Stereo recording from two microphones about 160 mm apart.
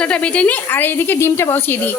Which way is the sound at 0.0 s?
5° left (ahead or behind).